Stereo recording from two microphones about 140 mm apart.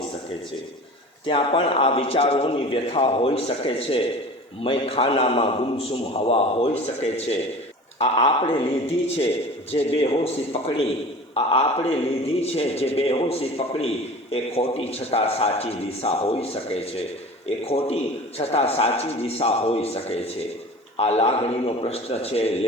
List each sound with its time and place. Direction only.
1.3 s a man's voice: 45° left (ahead or behind)